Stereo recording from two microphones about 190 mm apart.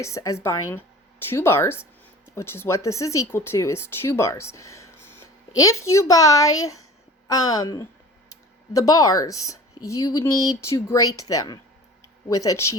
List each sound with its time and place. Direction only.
0.0 s speech: 15° left (ahead or behind)